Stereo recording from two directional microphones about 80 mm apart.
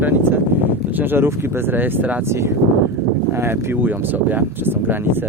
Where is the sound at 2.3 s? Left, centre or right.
Right.